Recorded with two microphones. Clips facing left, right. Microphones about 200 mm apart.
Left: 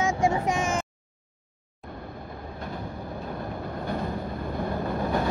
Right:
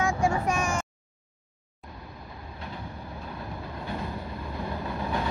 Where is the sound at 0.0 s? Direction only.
20° left (ahead or behind).